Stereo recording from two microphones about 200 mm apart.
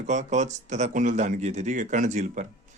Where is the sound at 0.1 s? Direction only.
35° right (ahead or behind).